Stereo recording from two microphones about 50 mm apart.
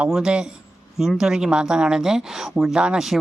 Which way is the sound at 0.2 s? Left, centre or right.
Centre.